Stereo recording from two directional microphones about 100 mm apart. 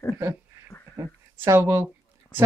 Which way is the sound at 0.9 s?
30° right (ahead or behind).